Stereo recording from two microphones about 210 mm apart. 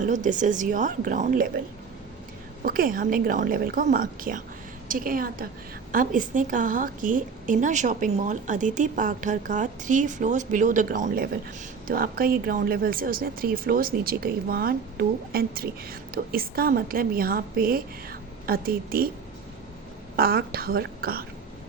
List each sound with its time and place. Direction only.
0.0 s a woman's voice: 35° right (ahead or behind)
2.6 s a woman's voice: 40° right (ahead or behind)
20.1 s speech: 45° right (ahead or behind)